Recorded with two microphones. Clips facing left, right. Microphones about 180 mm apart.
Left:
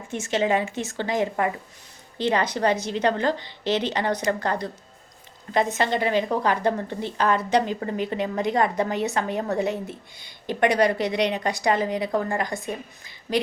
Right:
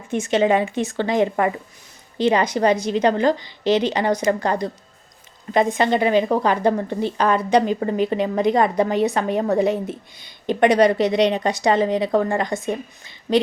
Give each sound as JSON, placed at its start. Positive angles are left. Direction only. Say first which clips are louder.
{"t": 0.1, "sound": "a woman's voice", "louder": "right 5 dB", "side_deg": -20}